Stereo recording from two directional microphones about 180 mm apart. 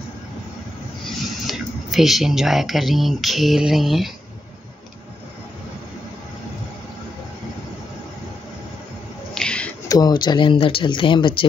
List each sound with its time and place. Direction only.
1.0 s speech: centre (ahead or behind)
9.3 s a sound: 5° left (ahead or behind)
9.8 s speech: 20° left (ahead or behind)